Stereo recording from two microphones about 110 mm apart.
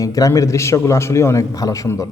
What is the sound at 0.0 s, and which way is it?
A man's voice, 30° left (ahead or behind).